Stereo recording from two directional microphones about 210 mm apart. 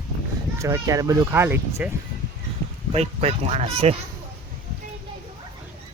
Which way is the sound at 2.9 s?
30° right (ahead or behind).